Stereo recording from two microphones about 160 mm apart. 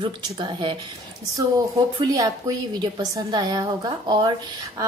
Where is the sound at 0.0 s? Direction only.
30° right (ahead or behind).